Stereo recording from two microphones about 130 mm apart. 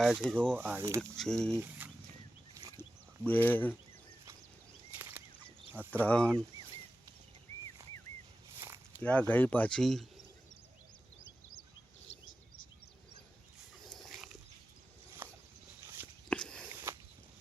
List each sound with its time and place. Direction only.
0.0 s speech: 5° right (ahead or behind)
0.5 s speech: 15° right (ahead or behind)
1.1 s speech: 5° left (ahead or behind)
1.5 s speech: 15° right (ahead or behind)
2.6 s a sound: 30° right (ahead or behind)
3.2 s speech: 15° left (ahead or behind)
4.9 s bird flight: 15° right (ahead or behind)
5.9 s speech: 10° left (ahead or behind)
8.5 s walk: 20° right (ahead or behind)
9.0 s speech: 10° left (ahead or behind)
13.8 s dog: centre (ahead or behind)
15.2 s a sound: 15° right (ahead or behind)
16.3 s a sound: 5° left (ahead or behind)
16.6 s a sound: 20° right (ahead or behind)